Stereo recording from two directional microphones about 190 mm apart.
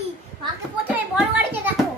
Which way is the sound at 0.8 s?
10° right (ahead or behind).